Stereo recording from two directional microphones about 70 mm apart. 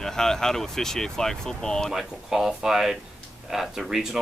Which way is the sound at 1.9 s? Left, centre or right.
Centre.